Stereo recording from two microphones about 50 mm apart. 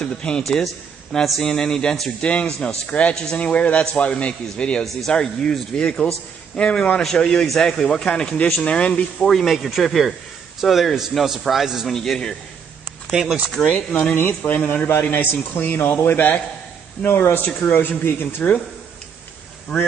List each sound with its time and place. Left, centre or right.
0.0 s a man's voice: centre
0.4 s a man's voice: centre; by 9.0 s left
9.2 s a man's voice: centre
11.9 s speech: centre
13.1 s speech: centre
13.7 s a man's voice: left
14.1 s a man's voice: left
14.6 s a man's voice: left
14.9 s a man's voice: left
17.6 s speech: left
18.4 s a man's voice: centre